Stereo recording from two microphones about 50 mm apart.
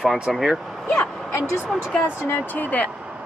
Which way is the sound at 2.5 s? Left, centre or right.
Left.